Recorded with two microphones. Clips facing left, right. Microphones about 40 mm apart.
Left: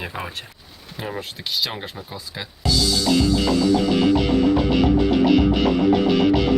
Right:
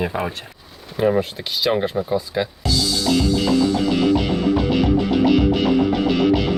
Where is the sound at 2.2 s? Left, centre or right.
Centre.